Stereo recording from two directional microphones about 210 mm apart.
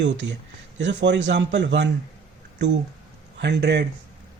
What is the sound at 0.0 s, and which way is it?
A man's voice, 55° right (ahead or behind).